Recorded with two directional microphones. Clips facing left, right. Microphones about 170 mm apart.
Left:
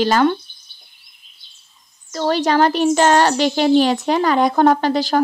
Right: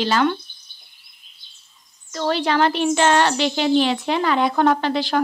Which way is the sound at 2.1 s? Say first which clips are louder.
Left 3 dB; 40° left (ahead or behind).